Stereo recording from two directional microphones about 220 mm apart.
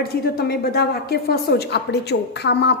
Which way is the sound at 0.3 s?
45° left (ahead or behind).